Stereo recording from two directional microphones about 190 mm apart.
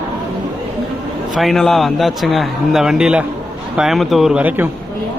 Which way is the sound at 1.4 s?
Centre (ahead or behind).